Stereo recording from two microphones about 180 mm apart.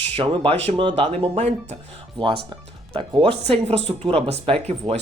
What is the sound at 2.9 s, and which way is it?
Speech, 30° right (ahead or behind).